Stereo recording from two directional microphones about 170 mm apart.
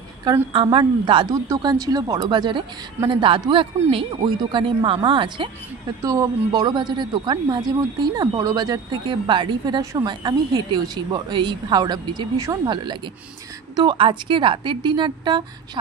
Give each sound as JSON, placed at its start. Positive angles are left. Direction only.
{"t": 0.2, "sound": "a woman's voice", "side_deg": -25}